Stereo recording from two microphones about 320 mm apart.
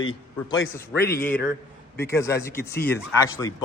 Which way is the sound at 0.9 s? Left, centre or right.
Left.